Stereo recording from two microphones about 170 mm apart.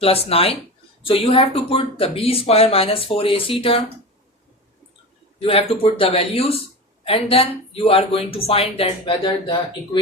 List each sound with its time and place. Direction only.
0.0 s speech: 35° left (ahead or behind)
5.4 s speech: 35° left (ahead or behind)